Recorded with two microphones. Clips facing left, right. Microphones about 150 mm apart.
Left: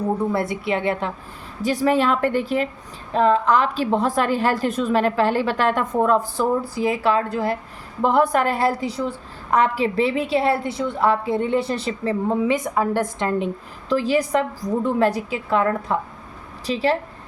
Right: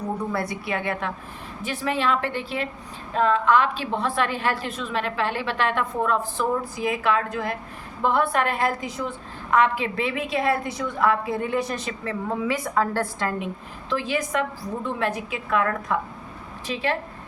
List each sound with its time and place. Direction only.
0.3 s a woman's voice: 25° left (ahead or behind)
1.6 s a woman's voice: 40° left (ahead or behind); by 13.5 s 20° left (ahead or behind)
13.9 s a woman's voice: 35° left (ahead or behind)